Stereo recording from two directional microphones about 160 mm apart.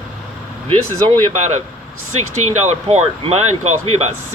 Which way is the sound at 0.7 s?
40° right (ahead or behind).